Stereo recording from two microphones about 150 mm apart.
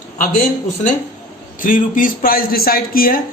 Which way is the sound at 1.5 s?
65° left (ahead or behind).